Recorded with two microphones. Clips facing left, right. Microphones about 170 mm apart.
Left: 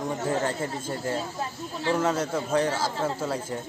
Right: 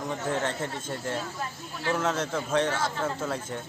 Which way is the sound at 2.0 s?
10° left (ahead or behind).